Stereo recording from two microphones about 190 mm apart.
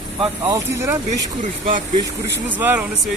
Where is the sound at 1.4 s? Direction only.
45° right (ahead or behind).